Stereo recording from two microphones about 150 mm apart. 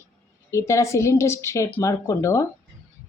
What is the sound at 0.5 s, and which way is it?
Speech, 20° left (ahead or behind).